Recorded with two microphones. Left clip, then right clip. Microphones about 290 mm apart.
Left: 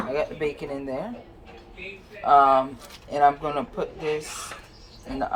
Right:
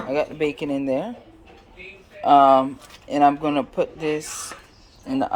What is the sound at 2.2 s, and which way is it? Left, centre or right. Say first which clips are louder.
Speech: right 3 dB; right.